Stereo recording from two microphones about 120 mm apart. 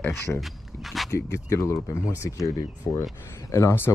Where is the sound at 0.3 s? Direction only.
10° left (ahead or behind).